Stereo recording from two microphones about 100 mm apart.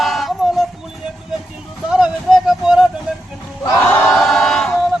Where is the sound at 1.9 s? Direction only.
5° right (ahead or behind).